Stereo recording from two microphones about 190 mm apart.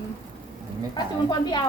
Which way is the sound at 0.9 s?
20° left (ahead or behind).